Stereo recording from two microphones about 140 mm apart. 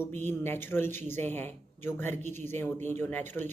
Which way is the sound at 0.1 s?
15° left (ahead or behind).